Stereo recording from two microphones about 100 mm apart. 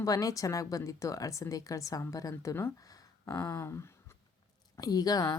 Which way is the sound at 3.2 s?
30° left (ahead or behind).